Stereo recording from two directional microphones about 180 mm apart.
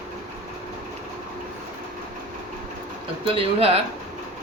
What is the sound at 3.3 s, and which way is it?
Speech, 35° right (ahead or behind).